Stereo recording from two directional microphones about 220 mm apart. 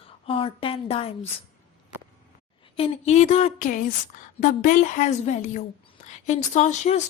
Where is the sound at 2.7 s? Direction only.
30° left (ahead or behind).